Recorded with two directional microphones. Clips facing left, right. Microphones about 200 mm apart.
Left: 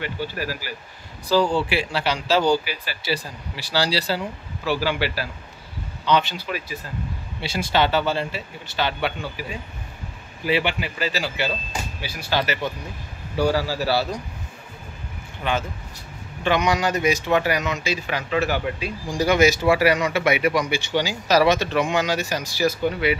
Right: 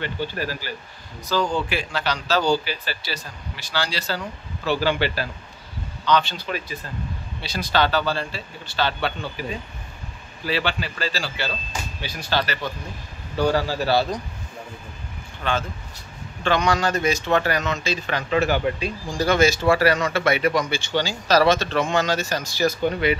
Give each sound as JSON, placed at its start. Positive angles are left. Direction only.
{"t": 0.0, "sound": "speech", "side_deg": 10}
{"t": 1.3, "sound": "speech", "side_deg": 30}
{"t": 2.4, "sound": "speech", "side_deg": 10}
{"t": 3.7, "sound": "speech", "side_deg": 35}
{"t": 4.6, "sound": "speech", "side_deg": 10}
{"t": 6.3, "sound": "speech", "side_deg": 10}
{"t": 7.4, "sound": "speech", "side_deg": 25}
{"t": 15.4, "sound": "speech", "side_deg": 15}